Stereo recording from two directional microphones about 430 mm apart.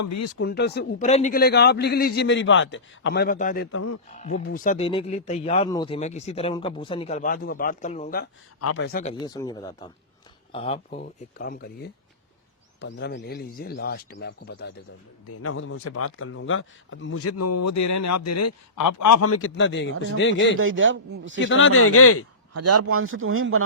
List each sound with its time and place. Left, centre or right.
0.0 s speech: left
0.3 s a man's voice: left
4.2 s speech: centre
8.6 s a man's voice: left
20.6 s speech: right
21.3 s a man's voice: left
22.5 s speech: right